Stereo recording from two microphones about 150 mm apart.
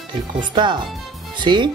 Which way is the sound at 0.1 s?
30° right (ahead or behind).